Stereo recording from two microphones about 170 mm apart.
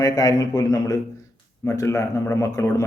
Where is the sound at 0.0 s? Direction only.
20° left (ahead or behind).